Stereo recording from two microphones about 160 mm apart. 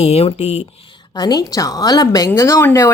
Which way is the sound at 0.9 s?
25° left (ahead or behind).